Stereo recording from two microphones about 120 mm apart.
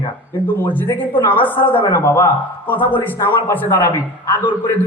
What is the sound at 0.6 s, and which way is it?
A man's voice, 15° left (ahead or behind).